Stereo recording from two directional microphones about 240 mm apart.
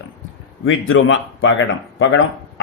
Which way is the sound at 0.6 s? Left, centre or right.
Left.